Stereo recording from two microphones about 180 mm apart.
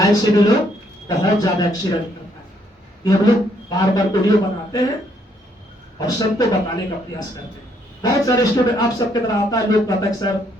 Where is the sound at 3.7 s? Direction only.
20° left (ahead or behind).